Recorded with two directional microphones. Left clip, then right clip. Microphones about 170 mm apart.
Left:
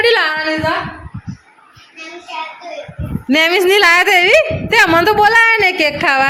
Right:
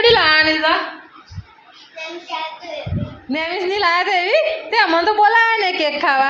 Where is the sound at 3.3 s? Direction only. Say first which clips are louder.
Left 10 dB; 55° left (ahead or behind).